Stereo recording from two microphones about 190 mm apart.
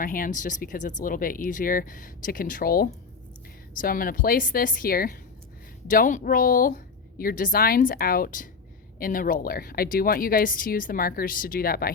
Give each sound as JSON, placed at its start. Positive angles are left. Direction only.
{"t": 0.0, "sound": "speech", "side_deg": 45}